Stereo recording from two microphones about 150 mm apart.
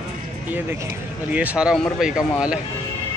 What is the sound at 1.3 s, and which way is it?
A man's voice, 10° right (ahead or behind).